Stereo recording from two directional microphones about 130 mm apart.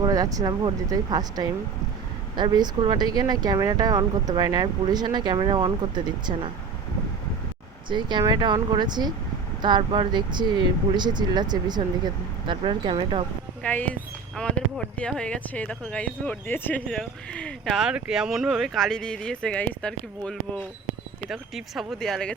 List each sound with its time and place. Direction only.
0.0 s speech: 30° right (ahead or behind)
7.9 s speech: 35° right (ahead or behind)
13.6 s speech: 10° left (ahead or behind)
17.7 s speech: 5° right (ahead or behind)